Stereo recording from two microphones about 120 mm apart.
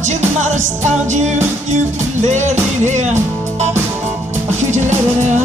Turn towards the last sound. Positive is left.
turn(degrees=-80)